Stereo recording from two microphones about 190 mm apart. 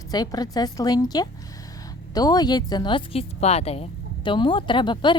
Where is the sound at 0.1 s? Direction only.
20° left (ahead or behind).